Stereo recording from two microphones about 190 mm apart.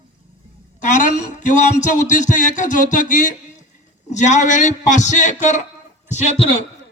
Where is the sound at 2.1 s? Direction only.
40° left (ahead or behind).